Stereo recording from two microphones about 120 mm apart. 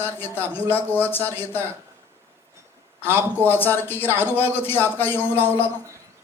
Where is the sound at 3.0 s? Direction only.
15° left (ahead or behind).